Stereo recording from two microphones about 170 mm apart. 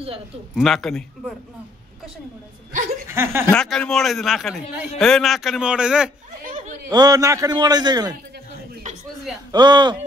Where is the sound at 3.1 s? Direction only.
15° right (ahead or behind).